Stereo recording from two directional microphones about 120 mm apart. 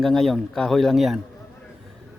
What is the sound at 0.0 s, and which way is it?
A man's voice, centre (ahead or behind).